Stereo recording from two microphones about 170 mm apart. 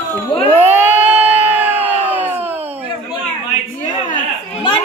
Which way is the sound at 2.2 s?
10° right (ahead or behind).